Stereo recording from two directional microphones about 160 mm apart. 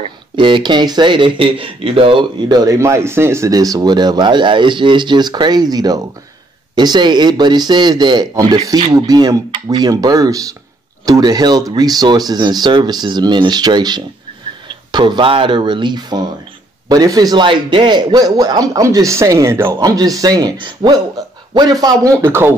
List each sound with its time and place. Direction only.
0.0 s speech: 30° right (ahead or behind); by 22.5 s 15° right (ahead or behind)